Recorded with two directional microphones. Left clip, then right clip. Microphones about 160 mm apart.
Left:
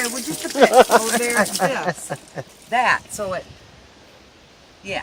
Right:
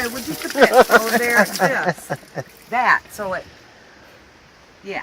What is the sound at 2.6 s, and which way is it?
Speech, 25° left (ahead or behind).